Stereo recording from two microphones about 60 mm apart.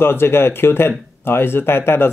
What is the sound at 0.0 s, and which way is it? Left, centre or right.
Speech, left.